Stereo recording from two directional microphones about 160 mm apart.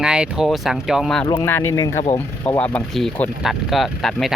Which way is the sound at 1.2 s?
15° left (ahead or behind).